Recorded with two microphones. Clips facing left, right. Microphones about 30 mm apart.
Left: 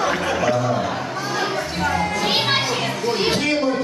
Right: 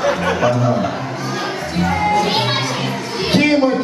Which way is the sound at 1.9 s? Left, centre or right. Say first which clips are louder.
Right 7 dB; centre.